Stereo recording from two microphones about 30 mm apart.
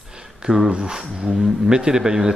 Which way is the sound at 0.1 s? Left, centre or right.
Right.